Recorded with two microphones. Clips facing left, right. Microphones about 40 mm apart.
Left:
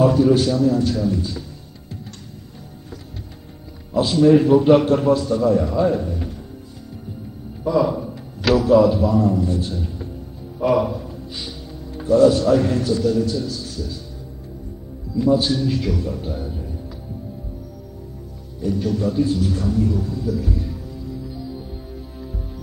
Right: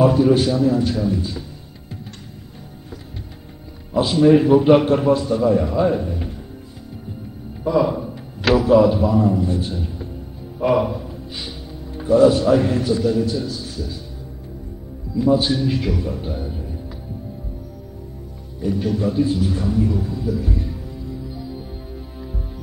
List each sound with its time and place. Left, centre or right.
0.0 s a man's voice: centre
3.9 s a man's voice: centre
7.6 s a man's voice: centre
15.1 s a man's voice: centre
18.6 s a sound: centre